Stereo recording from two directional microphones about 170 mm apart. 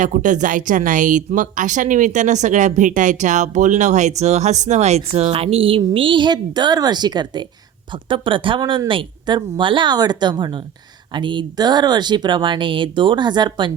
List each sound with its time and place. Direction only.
0.0 s speech: 50° right (ahead or behind); by 13.7 s 25° right (ahead or behind)